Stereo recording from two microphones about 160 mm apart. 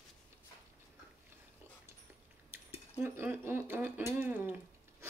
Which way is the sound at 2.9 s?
15° right (ahead or behind).